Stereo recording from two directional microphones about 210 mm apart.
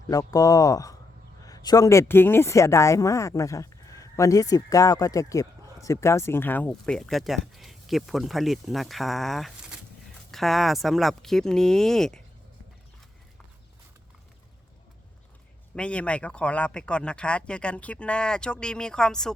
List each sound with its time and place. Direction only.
0.1 s speech: 15° left (ahead or behind)
15.7 s speech: 5° left (ahead or behind)